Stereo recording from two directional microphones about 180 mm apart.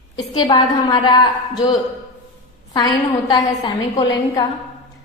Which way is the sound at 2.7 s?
25° left (ahead or behind).